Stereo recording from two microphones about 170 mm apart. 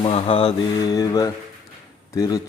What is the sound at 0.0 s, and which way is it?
A man's voice, 30° left (ahead or behind).